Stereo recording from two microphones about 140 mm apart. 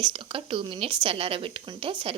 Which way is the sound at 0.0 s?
40° right (ahead or behind).